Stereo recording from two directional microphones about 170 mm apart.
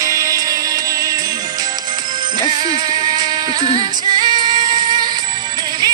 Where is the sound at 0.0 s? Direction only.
20° right (ahead or behind).